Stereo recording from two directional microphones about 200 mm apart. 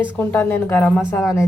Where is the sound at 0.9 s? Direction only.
5° right (ahead or behind).